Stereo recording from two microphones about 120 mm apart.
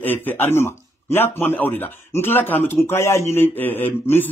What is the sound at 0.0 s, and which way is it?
A man's voice, 15° left (ahead or behind).